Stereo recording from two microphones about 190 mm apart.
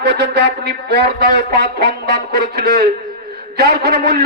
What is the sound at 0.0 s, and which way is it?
A man's voice, 65° right (ahead or behind).